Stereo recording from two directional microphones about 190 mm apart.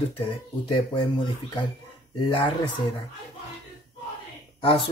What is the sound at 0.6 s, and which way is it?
Speech, 25° left (ahead or behind).